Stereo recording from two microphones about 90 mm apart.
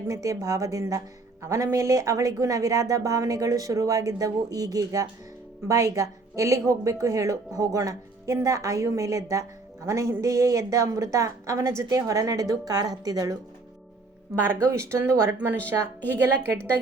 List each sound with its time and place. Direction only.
0.1 s a woman's voice: 40° right (ahead or behind)
14.4 s a woman's voice: 25° right (ahead or behind)